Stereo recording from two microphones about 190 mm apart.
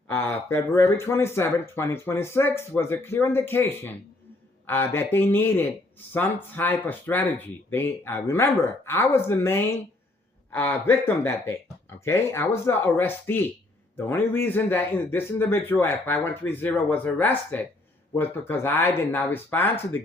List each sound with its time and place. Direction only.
0.1 s speech: 10° left (ahead or behind)